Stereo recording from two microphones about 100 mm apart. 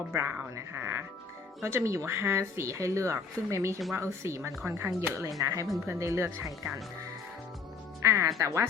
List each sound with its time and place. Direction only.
0.1 s speech: 25° right (ahead or behind)
8.0 s speech: 30° right (ahead or behind)